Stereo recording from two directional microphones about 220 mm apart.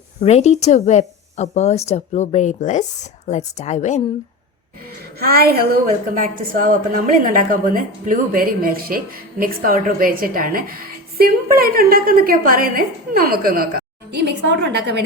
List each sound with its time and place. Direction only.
0.2 s speech: 30° left (ahead or behind)
5.2 s a woman's voice: 45° right (ahead or behind)